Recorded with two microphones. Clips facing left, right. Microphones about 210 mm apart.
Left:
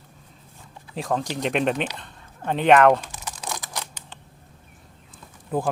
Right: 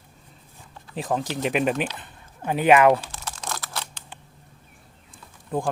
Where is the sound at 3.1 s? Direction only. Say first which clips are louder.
Even; 10° left (ahead or behind).